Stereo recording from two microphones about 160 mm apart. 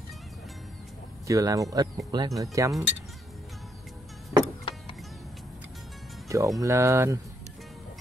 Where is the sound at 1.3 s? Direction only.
20° right (ahead or behind).